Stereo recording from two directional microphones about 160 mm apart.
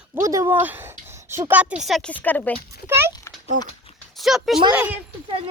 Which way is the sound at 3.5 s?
60° right (ahead or behind).